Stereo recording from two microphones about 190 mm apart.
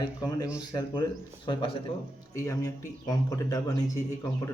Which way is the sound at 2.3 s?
15° left (ahead or behind).